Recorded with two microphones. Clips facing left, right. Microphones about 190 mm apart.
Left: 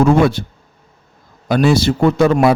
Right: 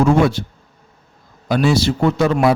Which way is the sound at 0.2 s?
60° left (ahead or behind).